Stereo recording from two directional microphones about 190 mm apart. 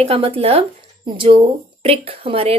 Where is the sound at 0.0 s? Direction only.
30° right (ahead or behind).